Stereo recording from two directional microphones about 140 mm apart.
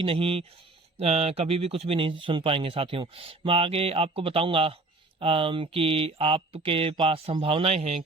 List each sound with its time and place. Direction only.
0.0 s speech: 40° right (ahead or behind)